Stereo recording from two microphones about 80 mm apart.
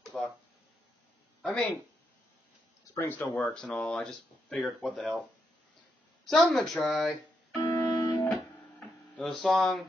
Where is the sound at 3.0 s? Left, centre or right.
Left.